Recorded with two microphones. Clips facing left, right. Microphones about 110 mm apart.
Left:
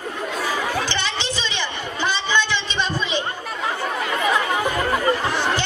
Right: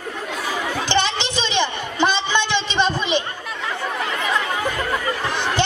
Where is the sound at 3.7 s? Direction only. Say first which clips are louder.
Left 1 dB; 35° left (ahead or behind).